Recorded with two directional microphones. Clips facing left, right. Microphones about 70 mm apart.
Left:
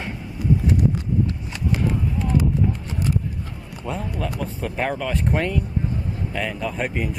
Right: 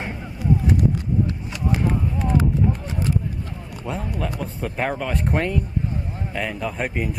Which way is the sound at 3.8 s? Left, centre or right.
Centre.